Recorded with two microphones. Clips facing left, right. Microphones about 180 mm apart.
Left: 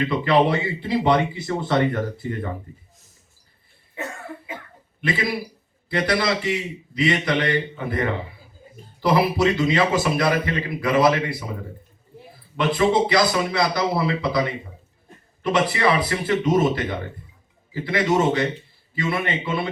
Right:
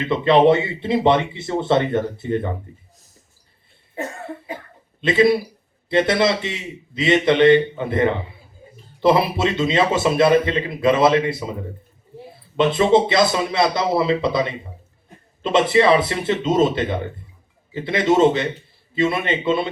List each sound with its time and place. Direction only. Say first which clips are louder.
0.0 s a man's voice: right 4 dB; 25° right (ahead or behind)
3.9 s cough: right 4 dB; 35° right (ahead or behind)
4.9 s a man's voice: right 9 dB; 25° right (ahead or behind)
12.5 s a man's voice: right 4 dB; 25° right (ahead or behind)